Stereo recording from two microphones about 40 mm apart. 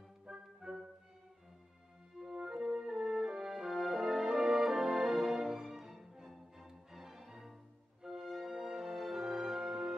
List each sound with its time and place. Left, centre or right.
0.3 s music: centre
2.1 s french horn: centre
8.0 s music: centre